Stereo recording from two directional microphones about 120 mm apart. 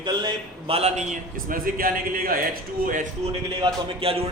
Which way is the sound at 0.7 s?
75° right (ahead or behind).